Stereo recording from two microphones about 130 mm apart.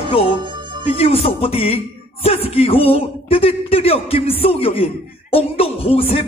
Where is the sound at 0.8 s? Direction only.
50° left (ahead or behind).